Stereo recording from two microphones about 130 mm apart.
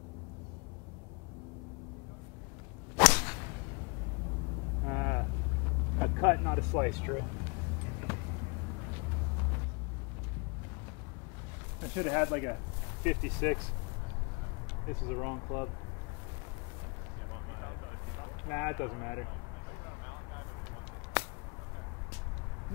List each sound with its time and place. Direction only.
3.0 s whip: 15° left (ahead or behind)
4.8 s vehicle: 25° left (ahead or behind)
5.9 s speech: 25° left (ahead or behind)
11.8 s speech: 25° left (ahead or behind)
15.0 s speech: 30° left (ahead or behind)
18.5 s speech: 25° left (ahead or behind)